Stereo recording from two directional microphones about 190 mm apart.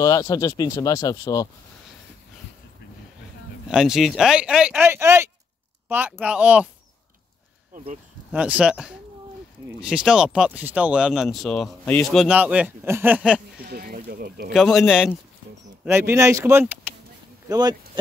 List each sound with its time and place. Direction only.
0.0 s speech: 20° left (ahead or behind)
3.6 s speech: 5° right (ahead or behind)
8.3 s speech: 5° right (ahead or behind)
13.7 s speech: 55° right (ahead or behind)
14.5 s speech: centre (ahead or behind); by 17.7 s 20° right (ahead or behind)